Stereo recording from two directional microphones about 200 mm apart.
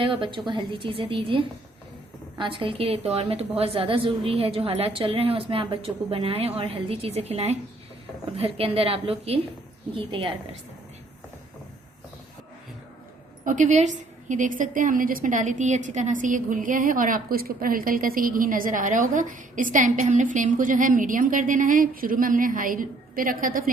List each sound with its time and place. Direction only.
0.0 s a woman's voice: 25° right (ahead or behind)
13.4 s a woman's voice: 40° right (ahead or behind)